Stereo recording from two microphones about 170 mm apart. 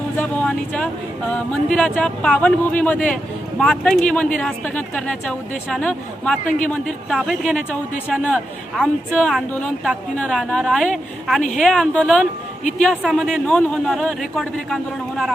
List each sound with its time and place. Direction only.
0.2 s a man's voice: 5° left (ahead or behind)